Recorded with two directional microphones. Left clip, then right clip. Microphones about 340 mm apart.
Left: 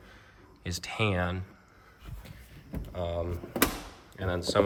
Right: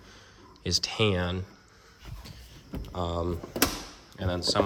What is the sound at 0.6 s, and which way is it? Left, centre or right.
Speech, centre.